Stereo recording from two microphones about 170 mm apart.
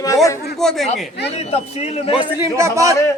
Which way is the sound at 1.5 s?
40° left (ahead or behind).